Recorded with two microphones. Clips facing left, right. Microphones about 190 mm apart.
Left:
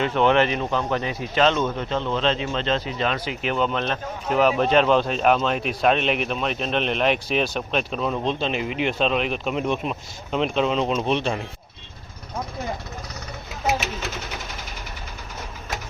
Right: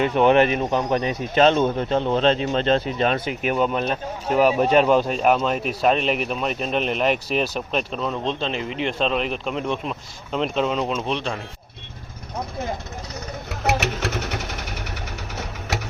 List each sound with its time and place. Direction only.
0.0 s speech: 15° right (ahead or behind)
1.4 s a man's voice: 50° right (ahead or behind)
3.5 s speech: 10° right (ahead or behind)
13.5 s sewing machine: 70° right (ahead or behind)